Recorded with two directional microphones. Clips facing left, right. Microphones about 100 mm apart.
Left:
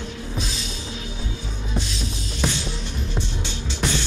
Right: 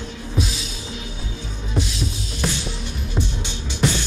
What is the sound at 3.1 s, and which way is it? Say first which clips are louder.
Music: right 5 dB; 15° right (ahead or behind).